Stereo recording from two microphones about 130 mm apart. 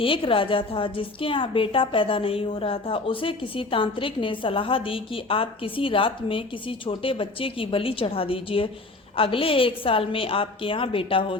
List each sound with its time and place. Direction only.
0.0 s a woman's voice: 40° left (ahead or behind)